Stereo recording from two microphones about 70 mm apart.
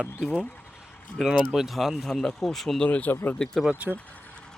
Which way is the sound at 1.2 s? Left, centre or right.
Centre.